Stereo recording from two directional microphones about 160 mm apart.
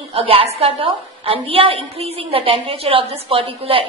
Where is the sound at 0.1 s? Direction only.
35° right (ahead or behind).